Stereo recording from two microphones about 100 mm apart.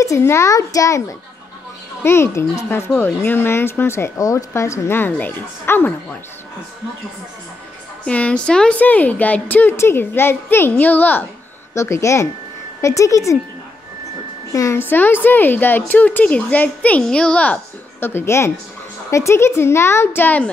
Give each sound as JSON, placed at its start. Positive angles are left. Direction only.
{"t": 0.0, "sound": "a child's voice", "side_deg": 30}
{"t": 8.0, "sound": "a woman's voice", "side_deg": 10}
{"t": 11.7, "sound": "a child's voice", "side_deg": 30}
{"t": 14.5, "sound": "speech", "side_deg": 35}
{"t": 14.9, "sound": "a woman's voice", "side_deg": 20}
{"t": 18.0, "sound": "speech", "side_deg": 25}